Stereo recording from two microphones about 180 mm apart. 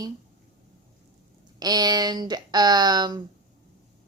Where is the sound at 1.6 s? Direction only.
20° right (ahead or behind).